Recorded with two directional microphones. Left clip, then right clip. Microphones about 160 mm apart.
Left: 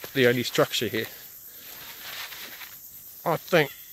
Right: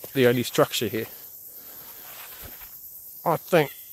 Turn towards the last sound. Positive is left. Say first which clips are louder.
# right 1 dB
turn(degrees=-15)  # may be behind; listen again after turning